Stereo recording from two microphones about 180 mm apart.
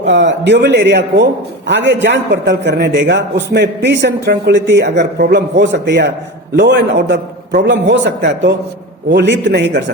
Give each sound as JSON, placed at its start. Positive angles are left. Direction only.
{"t": 0.0, "sound": "a man's voice", "side_deg": -75}